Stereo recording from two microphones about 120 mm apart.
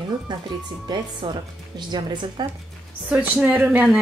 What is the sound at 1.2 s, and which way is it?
Speech, 40° right (ahead or behind).